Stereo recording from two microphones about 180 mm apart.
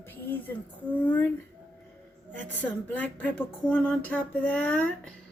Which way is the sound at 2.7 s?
10° left (ahead or behind).